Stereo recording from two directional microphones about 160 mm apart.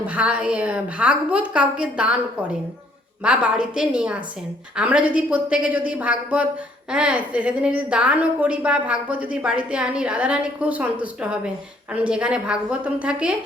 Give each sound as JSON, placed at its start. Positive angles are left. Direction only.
{"t": 0.0, "sound": "a woman's voice", "side_deg": -10}